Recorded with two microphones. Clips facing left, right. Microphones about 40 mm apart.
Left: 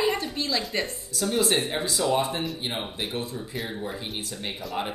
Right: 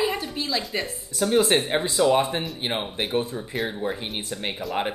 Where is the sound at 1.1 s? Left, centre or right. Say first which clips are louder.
Right 4 dB; right.